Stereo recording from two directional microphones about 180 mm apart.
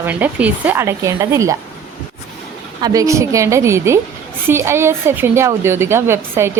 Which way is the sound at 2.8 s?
20° right (ahead or behind).